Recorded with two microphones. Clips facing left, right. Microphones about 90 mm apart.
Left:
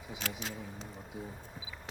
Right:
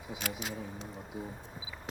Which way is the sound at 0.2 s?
10° right (ahead or behind).